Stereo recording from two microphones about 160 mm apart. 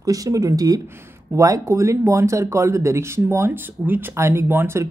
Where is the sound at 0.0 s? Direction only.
20° right (ahead or behind).